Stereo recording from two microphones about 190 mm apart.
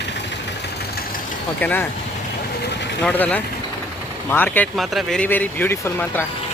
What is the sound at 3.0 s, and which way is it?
Speech, 5° left (ahead or behind).